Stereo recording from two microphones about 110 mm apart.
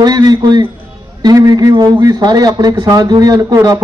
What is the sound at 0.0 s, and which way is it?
Speech, 35° right (ahead or behind).